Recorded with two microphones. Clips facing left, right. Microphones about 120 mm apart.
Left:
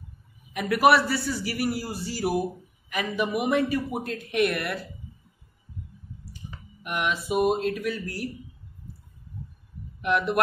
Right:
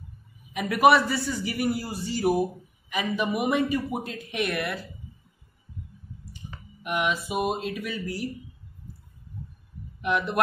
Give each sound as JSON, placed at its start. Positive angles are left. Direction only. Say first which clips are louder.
{"t": 0.6, "sound": "a man's voice", "louder": "right 1 dB", "side_deg": 0}
{"t": 6.8, "sound": "a man's voice", "louder": "right 2 dB", "side_deg": 0}
{"t": 10.0, "sound": "a man's voice", "louder": "left 2 dB", "side_deg": 0}